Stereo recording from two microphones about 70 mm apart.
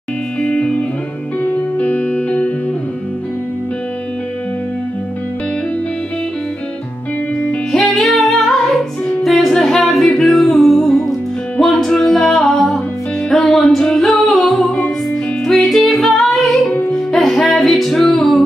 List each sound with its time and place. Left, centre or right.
0.4 s music: centre
7.7 s music: centre